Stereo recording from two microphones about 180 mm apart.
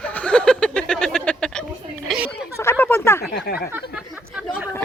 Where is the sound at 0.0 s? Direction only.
5° left (ahead or behind).